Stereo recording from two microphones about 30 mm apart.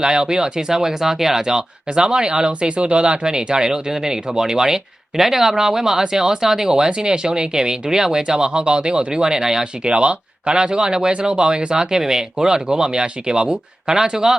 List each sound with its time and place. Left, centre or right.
0.0 s speech: right
2.5 s speech: right; by 5.2 s centre
5.2 s speech: centre
9.9 s speech: right; by 14.3 s centre